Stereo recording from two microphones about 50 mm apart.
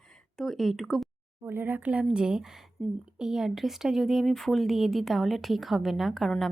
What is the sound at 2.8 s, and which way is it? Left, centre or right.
Speech, left.